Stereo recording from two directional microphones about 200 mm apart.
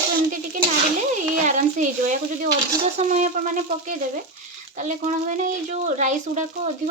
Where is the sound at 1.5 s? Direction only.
40° right (ahead or behind).